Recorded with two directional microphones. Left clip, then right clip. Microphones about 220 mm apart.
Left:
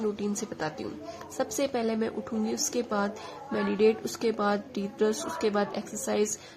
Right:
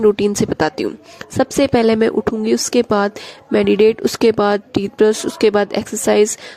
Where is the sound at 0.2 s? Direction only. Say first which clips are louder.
Right 17 dB; 45° right (ahead or behind).